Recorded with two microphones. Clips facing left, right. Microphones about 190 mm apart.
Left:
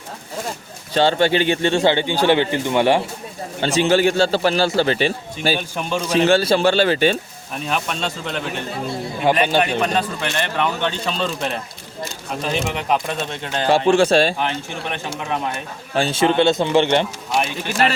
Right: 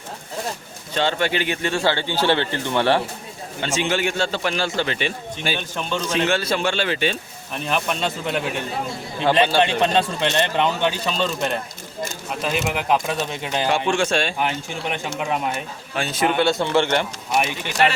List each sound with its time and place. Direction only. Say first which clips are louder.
0.9 s speech: left 5 dB; 30° left (ahead or behind); by 3.0 s 15° left (ahead or behind)
3.6 s a man's voice: left 7 dB; 35° left (ahead or behind)
5.5 s speech: left 2 dB; 10° left (ahead or behind)
6.2 s a man's voice: left 9 dB; 30° left (ahead or behind)
7.7 s speech: right 1 dB; 5° right (ahead or behind)
9.6 s speech: right 1 dB; 25° right (ahead or behind); by 13.7 s 10° right (ahead or behind)
13.7 s a man's voice: left 7 dB; 35° left (ahead or behind)
14.3 s speech: left 1 dB; 15° right (ahead or behind)
16.0 s speech: left 4 dB; 30° left (ahead or behind)